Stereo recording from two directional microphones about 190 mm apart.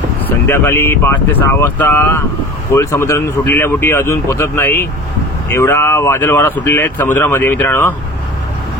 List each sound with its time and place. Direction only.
0.5 s speech: 10° left (ahead or behind)